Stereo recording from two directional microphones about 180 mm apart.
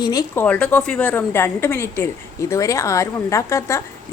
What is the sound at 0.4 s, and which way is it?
A woman's voice, 5° left (ahead or behind).